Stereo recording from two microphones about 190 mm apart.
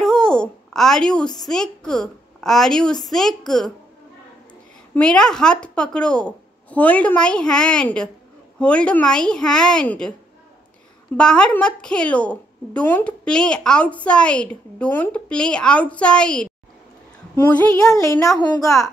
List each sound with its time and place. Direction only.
0.0 s a child's voice: 5° left (ahead or behind)
4.9 s a woman's voice: 5° left (ahead or behind)
11.1 s a woman's voice: 5° left (ahead or behind); by 18.6 s 20° left (ahead or behind)